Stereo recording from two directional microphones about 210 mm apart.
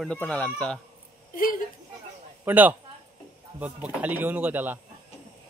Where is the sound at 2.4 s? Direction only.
10° right (ahead or behind).